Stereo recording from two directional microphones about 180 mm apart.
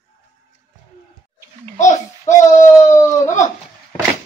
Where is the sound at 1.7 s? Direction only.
45° left (ahead or behind).